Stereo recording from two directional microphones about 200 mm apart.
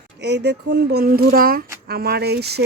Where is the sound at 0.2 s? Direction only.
55° right (ahead or behind).